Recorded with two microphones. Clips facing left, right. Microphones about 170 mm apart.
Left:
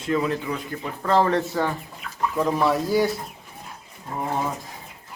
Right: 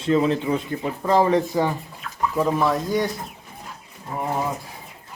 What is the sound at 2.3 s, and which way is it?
Speech, 5° right (ahead or behind).